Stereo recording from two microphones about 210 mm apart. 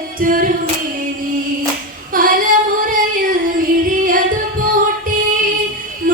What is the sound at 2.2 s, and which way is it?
Female singing, 40° right (ahead or behind).